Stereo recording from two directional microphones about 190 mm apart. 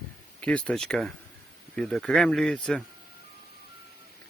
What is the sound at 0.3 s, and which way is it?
Speech, 5° left (ahead or behind).